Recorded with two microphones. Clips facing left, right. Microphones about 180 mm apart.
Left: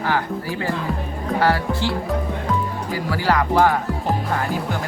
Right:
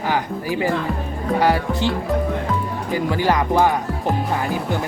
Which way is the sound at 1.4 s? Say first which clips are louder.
Right 1 dB; 15° right (ahead or behind).